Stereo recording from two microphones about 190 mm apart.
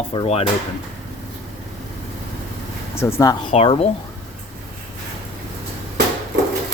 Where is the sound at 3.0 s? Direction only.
15° left (ahead or behind).